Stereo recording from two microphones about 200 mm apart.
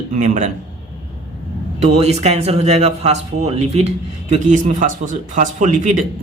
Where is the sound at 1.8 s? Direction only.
35° right (ahead or behind).